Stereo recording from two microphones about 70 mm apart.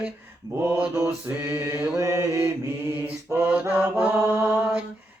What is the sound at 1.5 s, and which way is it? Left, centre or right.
Mantra, right.